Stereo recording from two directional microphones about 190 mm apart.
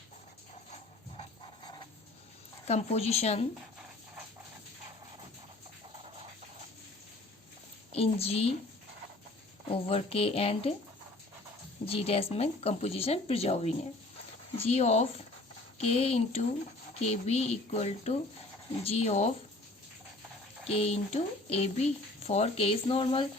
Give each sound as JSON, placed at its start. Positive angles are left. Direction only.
{"t": 1.1, "sound": "pant", "side_deg": 25}
{"t": 2.6, "sound": "speech", "side_deg": 35}
{"t": 5.9, "sound": "a sound", "side_deg": -30}
{"t": 7.9, "sound": "speech", "side_deg": 30}
{"t": 9.6, "sound": "speech", "side_deg": 30}
{"t": 11.9, "sound": "speech", "side_deg": 30}
{"t": 20.7, "sound": "speech", "side_deg": 30}